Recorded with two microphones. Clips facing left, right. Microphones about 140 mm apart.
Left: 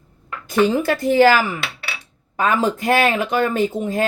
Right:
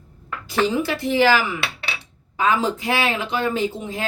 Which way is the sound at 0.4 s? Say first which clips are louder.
Left 4 dB; 50° left (ahead or behind).